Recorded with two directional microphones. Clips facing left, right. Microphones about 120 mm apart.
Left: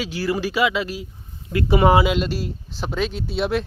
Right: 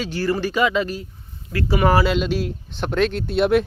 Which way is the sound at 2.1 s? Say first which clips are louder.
Right 2 dB; centre (ahead or behind).